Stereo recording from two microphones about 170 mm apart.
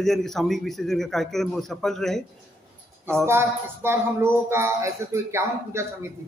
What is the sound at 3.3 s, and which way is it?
Speech, 15° right (ahead or behind).